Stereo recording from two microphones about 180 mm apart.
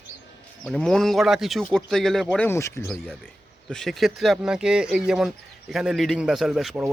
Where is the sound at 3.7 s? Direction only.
Centre (ahead or behind).